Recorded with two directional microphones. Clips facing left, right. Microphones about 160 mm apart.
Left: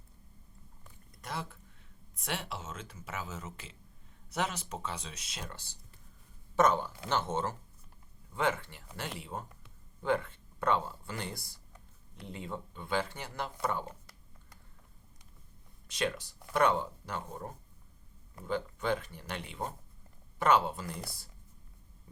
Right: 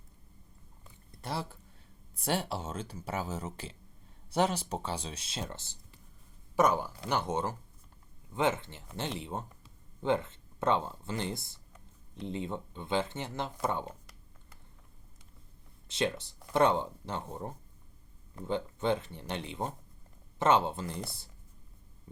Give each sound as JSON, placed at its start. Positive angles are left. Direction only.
{"t": 0.9, "sound": "a sound", "side_deg": -30}
{"t": 2.1, "sound": "speech", "side_deg": -35}
{"t": 6.6, "sound": "speech", "side_deg": -10}
{"t": 15.9, "sound": "speech", "side_deg": -25}